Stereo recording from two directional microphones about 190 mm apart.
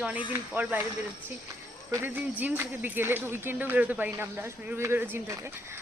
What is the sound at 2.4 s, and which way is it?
Speech, 10° right (ahead or behind).